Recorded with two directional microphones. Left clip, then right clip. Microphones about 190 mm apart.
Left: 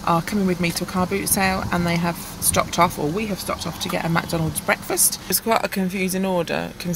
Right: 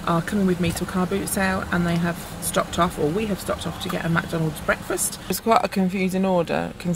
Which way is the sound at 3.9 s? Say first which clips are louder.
Left 2 dB; 30° left (ahead or behind).